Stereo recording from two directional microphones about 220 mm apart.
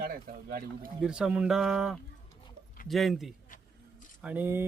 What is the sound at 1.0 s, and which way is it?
Speech, 5° right (ahead or behind).